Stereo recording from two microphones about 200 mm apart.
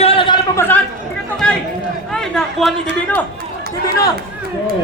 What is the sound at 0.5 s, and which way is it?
Speech, 10° left (ahead or behind).